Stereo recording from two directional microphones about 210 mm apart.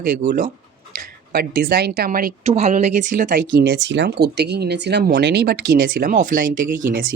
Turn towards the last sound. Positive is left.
turn(degrees=-40)  # may be behind; listen again after turning